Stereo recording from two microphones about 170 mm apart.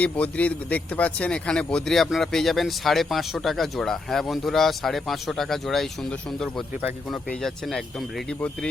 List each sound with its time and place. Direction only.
0.0 s a man's voice: 10° left (ahead or behind)